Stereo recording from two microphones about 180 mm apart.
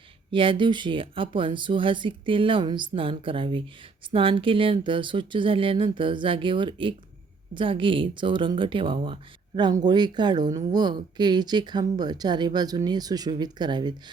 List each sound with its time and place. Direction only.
0.3 s speech: 30° right (ahead or behind)